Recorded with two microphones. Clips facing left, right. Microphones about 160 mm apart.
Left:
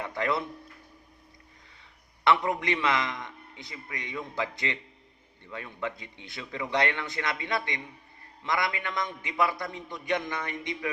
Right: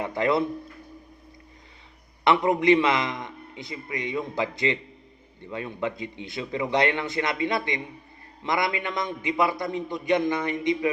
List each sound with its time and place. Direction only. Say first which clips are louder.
0.0 s speech: right 6 dB; 20° right (ahead or behind)
2.2 s a man's voice: right 5 dB; 20° right (ahead or behind)